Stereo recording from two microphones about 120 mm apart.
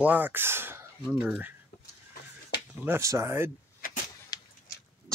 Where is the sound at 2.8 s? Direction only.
20° right (ahead or behind).